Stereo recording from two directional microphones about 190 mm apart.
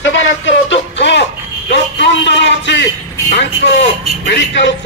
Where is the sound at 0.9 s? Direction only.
65° left (ahead or behind).